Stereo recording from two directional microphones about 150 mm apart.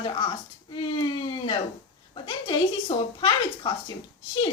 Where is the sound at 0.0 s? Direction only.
35° left (ahead or behind).